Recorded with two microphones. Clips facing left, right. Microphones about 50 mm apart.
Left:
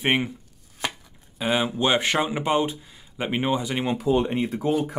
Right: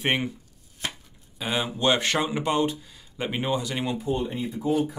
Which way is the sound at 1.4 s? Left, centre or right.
Centre.